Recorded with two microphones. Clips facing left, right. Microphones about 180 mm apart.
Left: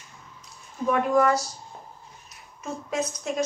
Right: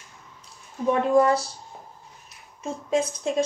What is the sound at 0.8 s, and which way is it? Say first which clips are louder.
Speech: right 2 dB; 30° right (ahead or behind).